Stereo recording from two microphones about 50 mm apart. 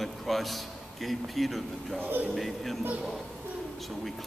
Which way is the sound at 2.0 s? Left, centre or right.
Right.